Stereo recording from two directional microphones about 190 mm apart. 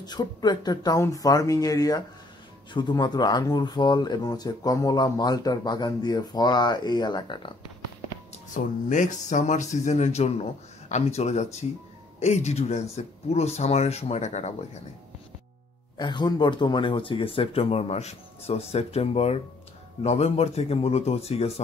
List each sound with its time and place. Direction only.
0.0 s speech: 20° left (ahead or behind)
8.5 s speech: 40° left (ahead or behind)
16.0 s speech: 25° left (ahead or behind)